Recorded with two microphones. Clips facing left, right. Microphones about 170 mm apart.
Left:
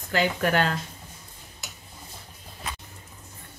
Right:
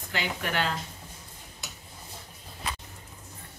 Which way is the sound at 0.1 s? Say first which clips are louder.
Left 8 dB; 45° left (ahead or behind).